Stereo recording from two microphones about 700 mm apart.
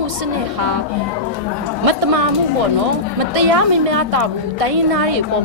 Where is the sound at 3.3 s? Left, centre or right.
Right.